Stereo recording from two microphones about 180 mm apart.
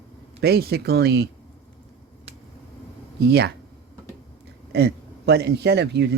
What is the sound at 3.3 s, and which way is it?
Speech, 65° right (ahead or behind).